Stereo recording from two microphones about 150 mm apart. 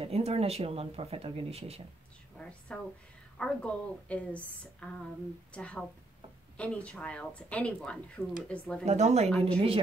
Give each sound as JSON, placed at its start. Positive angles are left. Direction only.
{"t": 0.0, "sound": "speech", "side_deg": -45}
{"t": 2.7, "sound": "speech", "side_deg": 5}
{"t": 8.8, "sound": "a woman's voice", "side_deg": -50}